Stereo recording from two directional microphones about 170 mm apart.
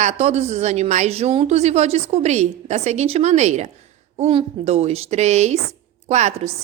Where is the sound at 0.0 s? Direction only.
40° right (ahead or behind).